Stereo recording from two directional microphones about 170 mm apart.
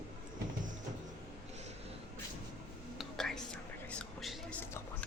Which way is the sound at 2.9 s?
Centre (ahead or behind).